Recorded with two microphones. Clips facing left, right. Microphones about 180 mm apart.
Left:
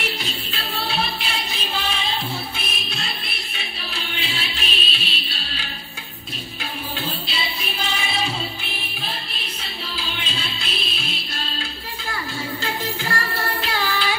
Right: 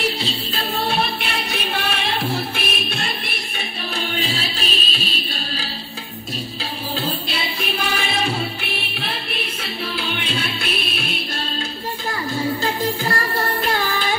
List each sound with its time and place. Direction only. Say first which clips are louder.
0.6 s music: right 4 dB; 50° right (ahead or behind)
4.2 s music: right 5 dB; 40° right (ahead or behind)
7.2 s music: right 4 dB; 55° right (ahead or behind)
12.8 s music: right 5 dB; 35° right (ahead or behind)